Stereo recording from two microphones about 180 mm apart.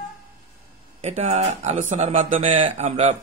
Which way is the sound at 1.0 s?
35° right (ahead or behind).